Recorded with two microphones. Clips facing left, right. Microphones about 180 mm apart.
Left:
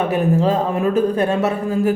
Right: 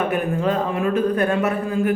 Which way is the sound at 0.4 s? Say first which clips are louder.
Left 3 dB; 35° left (ahead or behind).